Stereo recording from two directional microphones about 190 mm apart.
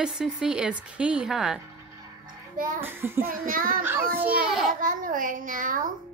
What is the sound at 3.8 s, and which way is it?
Speech, 10° right (ahead or behind).